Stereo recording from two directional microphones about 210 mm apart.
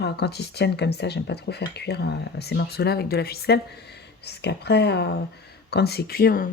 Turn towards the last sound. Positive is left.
turn(degrees=45)  # may be behind; listen again after turning